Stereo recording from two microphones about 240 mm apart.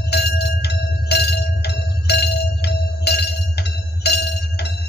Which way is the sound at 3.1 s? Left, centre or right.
Left.